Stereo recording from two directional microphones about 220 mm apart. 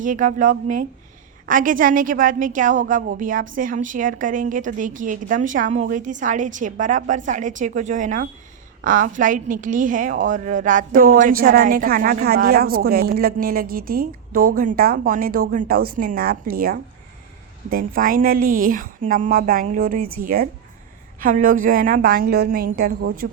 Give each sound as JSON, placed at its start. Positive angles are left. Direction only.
{"t": 0.0, "sound": "a woman's voice", "side_deg": -35}